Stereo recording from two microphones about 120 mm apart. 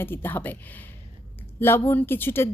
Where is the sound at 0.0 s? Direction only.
20° left (ahead or behind).